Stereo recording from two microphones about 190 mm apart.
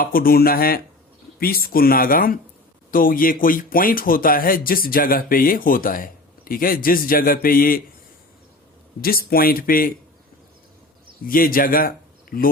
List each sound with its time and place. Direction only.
0.0 s speech: 50° left (ahead or behind)
9.0 s speech: 50° left (ahead or behind)
11.2 s speech: 50° left (ahead or behind)